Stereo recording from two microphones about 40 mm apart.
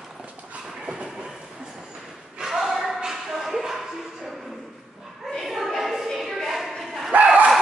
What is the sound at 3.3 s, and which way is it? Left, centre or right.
Music, centre.